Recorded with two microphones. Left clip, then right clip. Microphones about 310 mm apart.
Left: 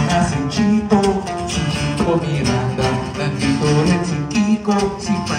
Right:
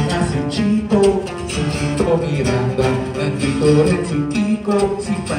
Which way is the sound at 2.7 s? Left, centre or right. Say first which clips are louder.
Right 2 dB; centre.